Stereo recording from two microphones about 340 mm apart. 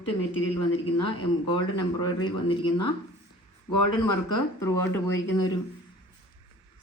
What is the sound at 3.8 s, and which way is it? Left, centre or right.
Speech, left.